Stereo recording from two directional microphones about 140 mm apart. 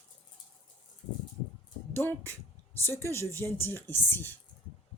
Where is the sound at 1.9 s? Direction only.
15° left (ahead or behind).